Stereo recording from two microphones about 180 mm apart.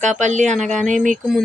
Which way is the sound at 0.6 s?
Centre (ahead or behind).